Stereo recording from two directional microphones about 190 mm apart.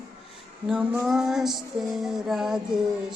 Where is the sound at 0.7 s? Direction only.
5° right (ahead or behind).